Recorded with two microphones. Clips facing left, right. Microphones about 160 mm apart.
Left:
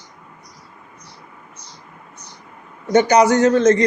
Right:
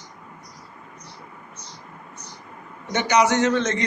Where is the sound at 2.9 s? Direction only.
40° left (ahead or behind).